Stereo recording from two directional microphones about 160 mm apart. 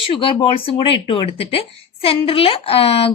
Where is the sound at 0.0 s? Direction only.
35° left (ahead or behind).